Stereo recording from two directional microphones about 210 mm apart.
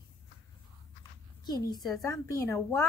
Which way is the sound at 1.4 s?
20° left (ahead or behind).